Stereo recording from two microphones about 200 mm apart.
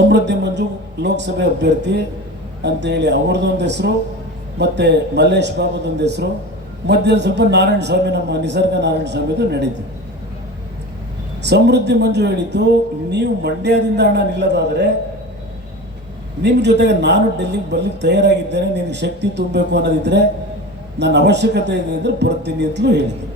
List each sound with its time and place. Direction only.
0.1 s speech: 60° right (ahead or behind)
11.4 s speech: 60° right (ahead or behind)
16.4 s speech: 60° right (ahead or behind)